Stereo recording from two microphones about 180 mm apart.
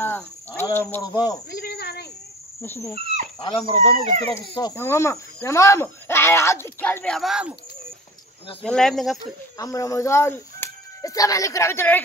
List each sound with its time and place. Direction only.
0.0 s speech: 10° left (ahead or behind)
1.5 s a sound: 60° left (ahead or behind)
2.6 s speech: 15° left (ahead or behind)
3.3 s speech: 25° left (ahead or behind); by 7.5 s 5° right (ahead or behind)
8.6 s speech: 5° left (ahead or behind)
9.2 s speech: 20° left (ahead or behind)